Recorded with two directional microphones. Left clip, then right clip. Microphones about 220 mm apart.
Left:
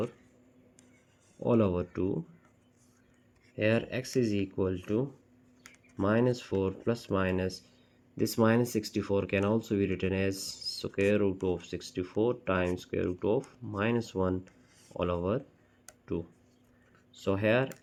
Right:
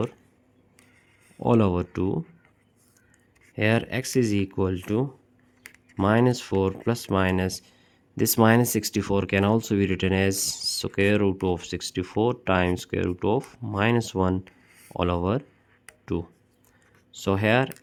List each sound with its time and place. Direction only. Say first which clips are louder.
1.5 s speech: right 5 dB; 45° right (ahead or behind)
3.5 s speech: right 5 dB; 45° right (ahead or behind)
17.1 s speech: right 5 dB; 45° right (ahead or behind)